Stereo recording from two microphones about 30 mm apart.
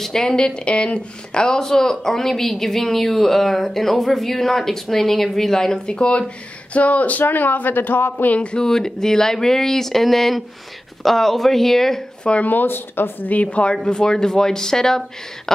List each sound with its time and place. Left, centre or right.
0.0 s speech: centre
0.7 s speech: left; by 5.8 s centre
5.9 s speech: left
8.4 s speech: left
8.6 s speech: centre
12.2 s speech: left
13.4 s speech: left
13.8 s speech: left